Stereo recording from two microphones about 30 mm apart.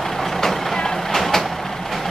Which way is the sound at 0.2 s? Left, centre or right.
Centre.